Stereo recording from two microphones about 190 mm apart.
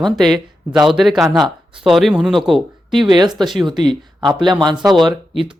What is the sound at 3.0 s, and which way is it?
Speech, 25° right (ahead or behind).